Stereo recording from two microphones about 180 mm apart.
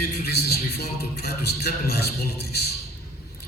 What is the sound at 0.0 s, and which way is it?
A man's voice, 60° left (ahead or behind).